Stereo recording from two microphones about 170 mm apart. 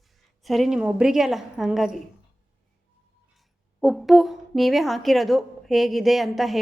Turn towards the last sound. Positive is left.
turn(degrees=0)  # may be behind; listen again after turning